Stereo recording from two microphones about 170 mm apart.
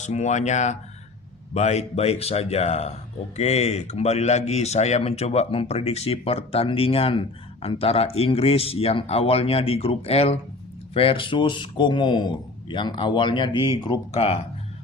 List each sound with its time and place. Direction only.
0.0 s a man's voice: 45° left (ahead or behind)